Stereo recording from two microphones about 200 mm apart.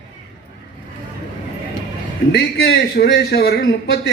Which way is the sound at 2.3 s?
55° left (ahead or behind).